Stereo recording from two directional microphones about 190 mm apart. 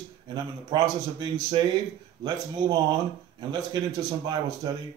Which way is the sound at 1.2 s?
25° right (ahead or behind).